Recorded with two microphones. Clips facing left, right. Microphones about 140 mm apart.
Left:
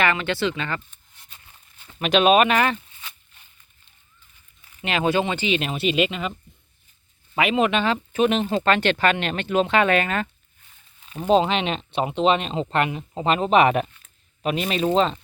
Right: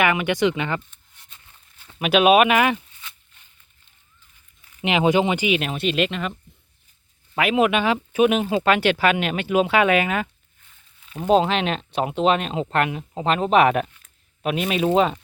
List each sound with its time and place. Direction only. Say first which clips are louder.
0.0 s speech: right 3 dB; 15° right (ahead or behind)
1.8 s speech: right 1 dB; 5° right (ahead or behind)
4.8 s speech: right 3 dB; 15° right (ahead or behind); by 6.3 s centre (ahead or behind)
7.3 s speech: right 1 dB; 5° right (ahead or behind)